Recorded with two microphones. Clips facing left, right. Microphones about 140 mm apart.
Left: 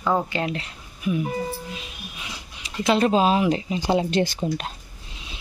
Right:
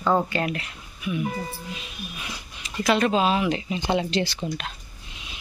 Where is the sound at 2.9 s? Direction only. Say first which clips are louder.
Left 2 dB; 35° left (ahead or behind).